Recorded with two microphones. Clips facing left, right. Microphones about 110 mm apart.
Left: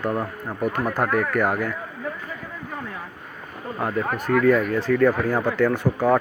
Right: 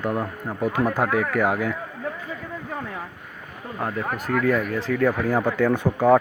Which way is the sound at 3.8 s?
10° left (ahead or behind).